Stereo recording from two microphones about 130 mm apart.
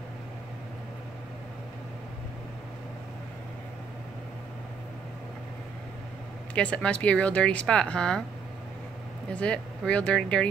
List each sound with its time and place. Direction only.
6.5 s speech: 10° left (ahead or behind)
9.3 s speech: 10° left (ahead or behind)